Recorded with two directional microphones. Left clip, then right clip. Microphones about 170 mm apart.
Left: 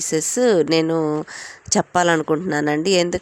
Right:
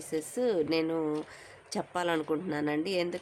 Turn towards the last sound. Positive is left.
turn(degrees=45)  # may be behind; listen again after turning